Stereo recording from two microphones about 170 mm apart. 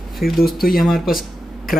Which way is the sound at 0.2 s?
60° left (ahead or behind).